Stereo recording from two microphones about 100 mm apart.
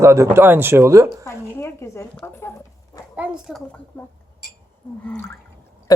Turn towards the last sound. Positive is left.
turn(degrees=20)  # may be behind; listen again after turning